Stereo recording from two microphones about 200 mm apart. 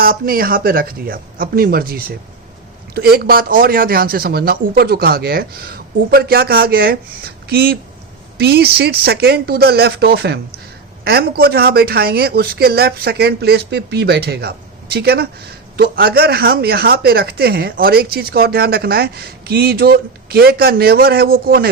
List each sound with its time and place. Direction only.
0.0 s speech: 45° right (ahead or behind)